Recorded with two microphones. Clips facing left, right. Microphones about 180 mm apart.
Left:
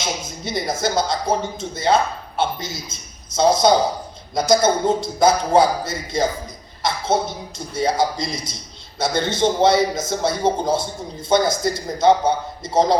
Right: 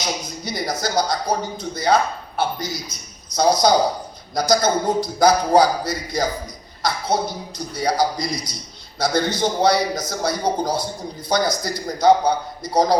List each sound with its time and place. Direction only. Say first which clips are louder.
0.0 s speech: even; 25° left (ahead or behind)